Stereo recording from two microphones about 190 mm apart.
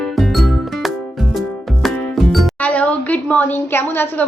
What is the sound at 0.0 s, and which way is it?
Music, centre (ahead or behind).